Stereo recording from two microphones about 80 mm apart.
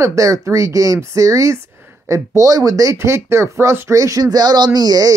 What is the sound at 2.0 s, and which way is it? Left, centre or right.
Speech, right.